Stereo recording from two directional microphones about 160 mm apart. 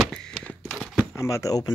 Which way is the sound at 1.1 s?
20° left (ahead or behind).